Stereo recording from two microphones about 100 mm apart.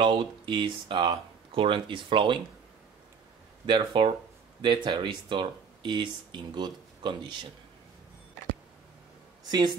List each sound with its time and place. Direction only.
0.0 s speech: 55° right (ahead or behind)
3.6 s speech: 55° right (ahead or behind)
9.5 s speech: 45° right (ahead or behind)